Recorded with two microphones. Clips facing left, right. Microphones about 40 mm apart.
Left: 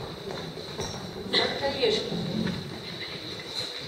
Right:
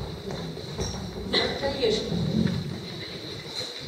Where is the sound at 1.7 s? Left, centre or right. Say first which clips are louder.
Right 1 dB; left.